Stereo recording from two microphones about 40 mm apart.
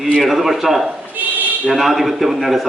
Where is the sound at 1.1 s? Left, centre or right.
Right.